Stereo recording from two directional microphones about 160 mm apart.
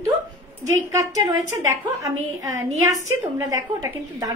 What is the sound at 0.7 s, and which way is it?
Speech, 20° right (ahead or behind).